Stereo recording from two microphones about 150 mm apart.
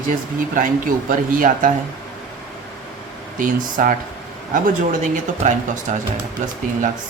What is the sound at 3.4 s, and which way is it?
Speech, 65° right (ahead or behind).